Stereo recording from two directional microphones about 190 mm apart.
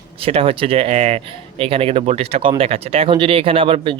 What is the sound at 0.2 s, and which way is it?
Speech, 30° right (ahead or behind).